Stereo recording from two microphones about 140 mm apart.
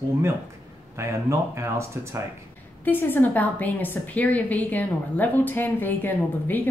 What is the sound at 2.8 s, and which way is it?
A woman's voice, 15° left (ahead or behind).